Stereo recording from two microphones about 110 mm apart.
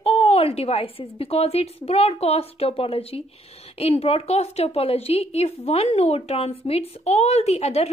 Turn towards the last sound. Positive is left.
turn(degrees=70)  # may be behind; listen again after turning